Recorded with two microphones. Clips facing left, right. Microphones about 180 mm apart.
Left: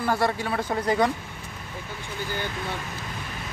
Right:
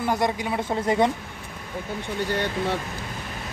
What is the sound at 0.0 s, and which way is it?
Speech, 20° right (ahead or behind).